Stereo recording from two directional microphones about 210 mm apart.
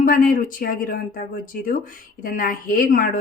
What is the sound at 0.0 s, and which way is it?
Speech, 40° left (ahead or behind).